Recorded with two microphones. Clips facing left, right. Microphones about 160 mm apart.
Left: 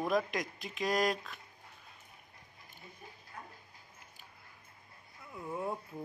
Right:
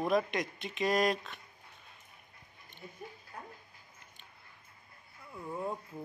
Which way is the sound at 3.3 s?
35° right (ahead or behind).